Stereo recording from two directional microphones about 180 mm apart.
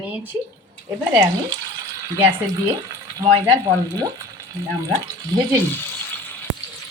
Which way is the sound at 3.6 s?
20° right (ahead or behind).